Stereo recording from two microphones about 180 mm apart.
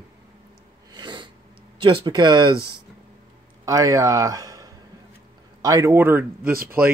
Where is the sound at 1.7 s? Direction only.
30° right (ahead or behind).